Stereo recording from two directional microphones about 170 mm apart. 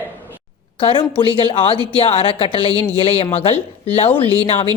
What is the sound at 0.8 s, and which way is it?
Speech, 35° left (ahead or behind).